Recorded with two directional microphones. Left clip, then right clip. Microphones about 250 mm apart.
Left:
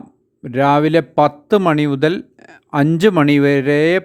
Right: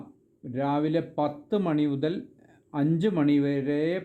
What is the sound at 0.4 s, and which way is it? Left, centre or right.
Speech, left.